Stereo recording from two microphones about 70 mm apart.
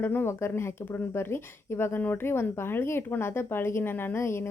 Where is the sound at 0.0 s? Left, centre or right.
Left.